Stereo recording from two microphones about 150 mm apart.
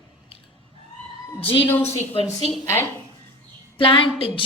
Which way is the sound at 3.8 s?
35° left (ahead or behind).